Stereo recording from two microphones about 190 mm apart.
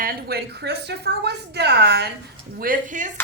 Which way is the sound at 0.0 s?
50° right (ahead or behind).